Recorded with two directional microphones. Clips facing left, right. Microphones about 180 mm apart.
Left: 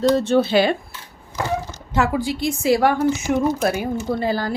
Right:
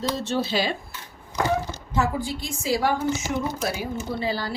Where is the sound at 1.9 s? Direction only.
75° left (ahead or behind).